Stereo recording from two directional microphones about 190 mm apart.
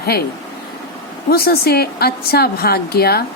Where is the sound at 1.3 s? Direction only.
55° left (ahead or behind).